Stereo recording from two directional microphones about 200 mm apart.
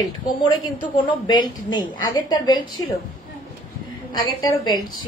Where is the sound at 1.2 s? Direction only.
20° left (ahead or behind).